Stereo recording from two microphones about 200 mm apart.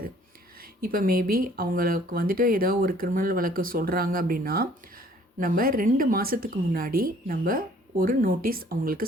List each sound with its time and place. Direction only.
0.8 s speech: 45° right (ahead or behind)